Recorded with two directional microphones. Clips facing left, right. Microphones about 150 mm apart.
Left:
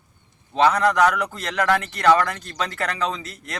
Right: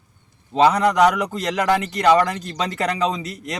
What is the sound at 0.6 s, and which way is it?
Speech, 15° right (ahead or behind).